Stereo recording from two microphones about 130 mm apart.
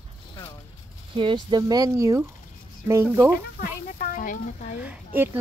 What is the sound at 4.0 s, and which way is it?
Speech, 90° left.